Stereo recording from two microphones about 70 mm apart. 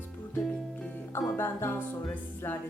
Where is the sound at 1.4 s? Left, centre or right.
Left.